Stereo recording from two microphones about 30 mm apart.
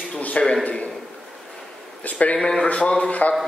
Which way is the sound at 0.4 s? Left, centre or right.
Left.